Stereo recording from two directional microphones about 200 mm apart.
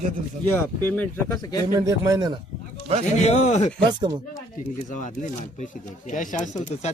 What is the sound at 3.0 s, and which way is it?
Speech, 35° left (ahead or behind).